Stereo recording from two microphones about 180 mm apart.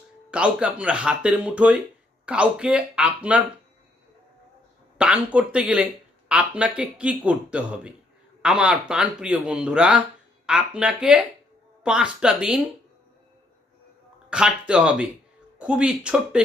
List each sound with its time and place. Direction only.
0.3 s speech: 5° right (ahead or behind)
4.9 s speech: 5° right (ahead or behind)
14.3 s speech: 5° right (ahead or behind)